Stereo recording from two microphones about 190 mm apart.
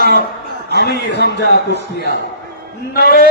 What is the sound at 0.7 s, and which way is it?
A man's voice, 60° left (ahead or behind).